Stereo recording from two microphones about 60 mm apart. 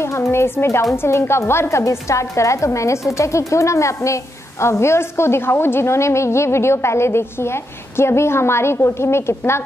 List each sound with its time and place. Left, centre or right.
0.0 s a woman's voice: left